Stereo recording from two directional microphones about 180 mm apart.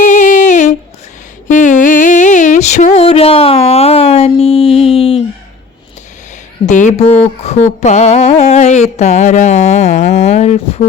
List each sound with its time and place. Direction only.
0.0 s humming: 45° left (ahead or behind)
1.5 s a sound: 45° left (ahead or behind)
6.7 s speech: 45° left (ahead or behind)